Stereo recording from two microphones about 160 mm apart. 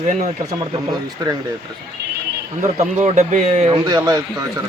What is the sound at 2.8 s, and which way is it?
Speech, 45° right (ahead or behind).